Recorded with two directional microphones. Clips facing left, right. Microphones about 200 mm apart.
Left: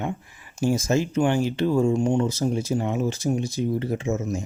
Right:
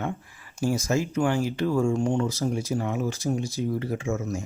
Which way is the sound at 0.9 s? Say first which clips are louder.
Left 2 dB; 30° left (ahead or behind).